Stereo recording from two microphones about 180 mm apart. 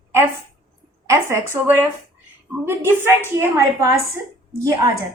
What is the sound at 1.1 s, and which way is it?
A woman's voice, 15° right (ahead or behind).